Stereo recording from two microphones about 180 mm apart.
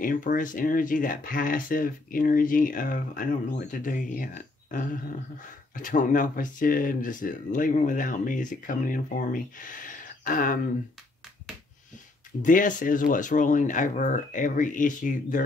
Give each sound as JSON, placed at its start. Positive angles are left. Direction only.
{"t": 0.0, "sound": "speech", "side_deg": 50}
{"t": 12.4, "sound": "speech", "side_deg": 45}